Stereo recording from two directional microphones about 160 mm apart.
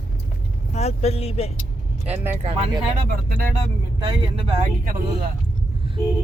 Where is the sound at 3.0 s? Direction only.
70° right (ahead or behind).